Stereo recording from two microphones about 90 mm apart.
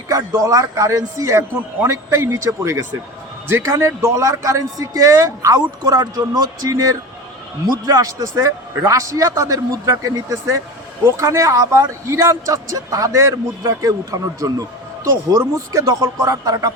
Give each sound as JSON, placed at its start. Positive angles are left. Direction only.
{"t": 0.1, "sound": "a man's voice", "side_deg": -35}
{"t": 5.5, "sound": "a man's voice", "side_deg": -50}